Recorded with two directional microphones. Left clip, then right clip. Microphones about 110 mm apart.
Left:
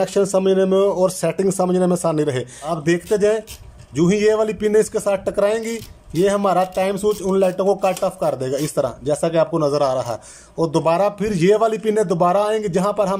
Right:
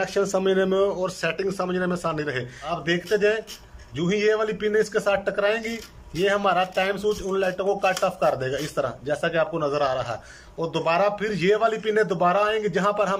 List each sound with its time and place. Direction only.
0.0 s speech: 40° left (ahead or behind)
0.4 s speech: 25° left (ahead or behind)
0.8 s speech: 55° left (ahead or behind)